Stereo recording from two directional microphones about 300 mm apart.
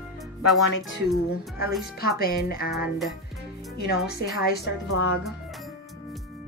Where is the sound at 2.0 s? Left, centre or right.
Left.